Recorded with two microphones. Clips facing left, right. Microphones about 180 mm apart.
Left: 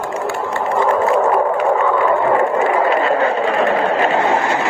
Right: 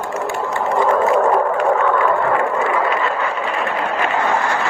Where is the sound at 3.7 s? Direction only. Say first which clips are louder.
Left 5 dB; 30° left (ahead or behind).